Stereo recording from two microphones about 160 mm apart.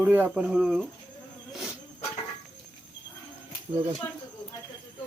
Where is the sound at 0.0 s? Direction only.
15° right (ahead or behind).